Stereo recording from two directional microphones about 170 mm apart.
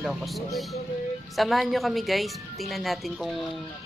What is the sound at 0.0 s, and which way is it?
Speech, centre (ahead or behind).